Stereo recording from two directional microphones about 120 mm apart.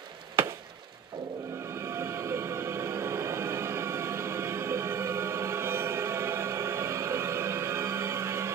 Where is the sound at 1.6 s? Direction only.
20° right (ahead or behind).